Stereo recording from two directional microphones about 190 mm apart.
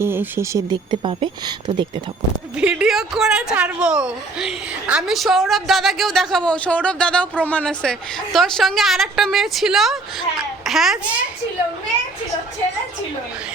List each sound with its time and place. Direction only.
0.0 s speech: 10° right (ahead or behind)
0.7 s a woman's voice: 25° right (ahead or behind)
2.6 s a woman's voice: 5° right (ahead or behind)